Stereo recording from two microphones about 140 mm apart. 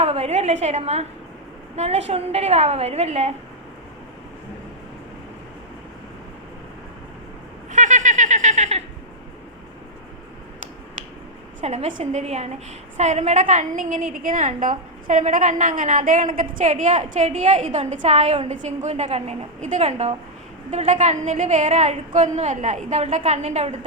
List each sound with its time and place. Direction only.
0.0 s a woman's voice: 45° right (ahead or behind)
7.7 s a sound: 65° right (ahead or behind)
11.6 s a woman's voice: 50° right (ahead or behind)